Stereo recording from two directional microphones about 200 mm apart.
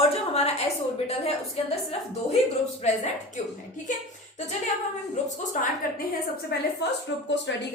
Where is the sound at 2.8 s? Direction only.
35° left (ahead or behind).